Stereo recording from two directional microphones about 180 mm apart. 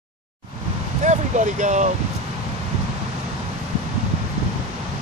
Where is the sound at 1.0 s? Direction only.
45° right (ahead or behind).